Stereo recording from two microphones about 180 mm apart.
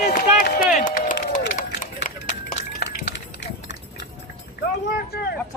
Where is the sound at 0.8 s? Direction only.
45° left (ahead or behind).